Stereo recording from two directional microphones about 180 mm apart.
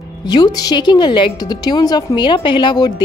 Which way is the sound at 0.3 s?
20° left (ahead or behind).